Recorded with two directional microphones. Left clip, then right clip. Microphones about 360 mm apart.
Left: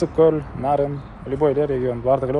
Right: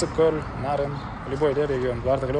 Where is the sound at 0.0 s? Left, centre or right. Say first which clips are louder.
Left 5 dB; centre.